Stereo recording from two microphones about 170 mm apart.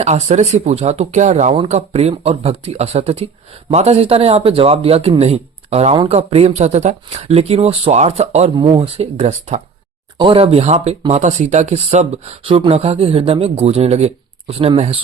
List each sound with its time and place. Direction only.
0.0 s a man's voice: 40° right (ahead or behind)